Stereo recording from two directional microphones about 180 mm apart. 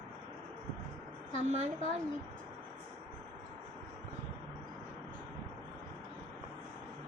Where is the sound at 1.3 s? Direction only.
40° right (ahead or behind).